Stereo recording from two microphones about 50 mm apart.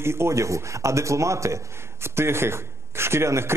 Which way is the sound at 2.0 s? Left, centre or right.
Right.